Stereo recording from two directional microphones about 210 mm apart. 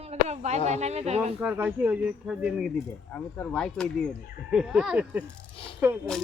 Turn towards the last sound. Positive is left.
turn(degrees=-10)  # may be behind; listen again after turning